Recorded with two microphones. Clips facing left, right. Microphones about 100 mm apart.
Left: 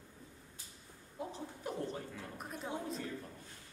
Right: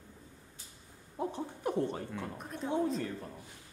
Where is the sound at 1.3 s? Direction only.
60° right (ahead or behind).